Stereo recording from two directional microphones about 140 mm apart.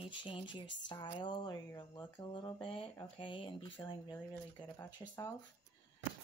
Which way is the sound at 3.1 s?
35° left (ahead or behind).